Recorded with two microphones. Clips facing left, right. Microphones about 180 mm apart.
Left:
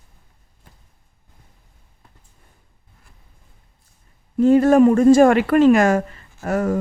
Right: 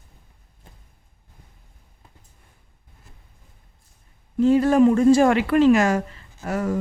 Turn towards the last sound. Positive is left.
turn(degrees=50)  # may be behind; listen again after turning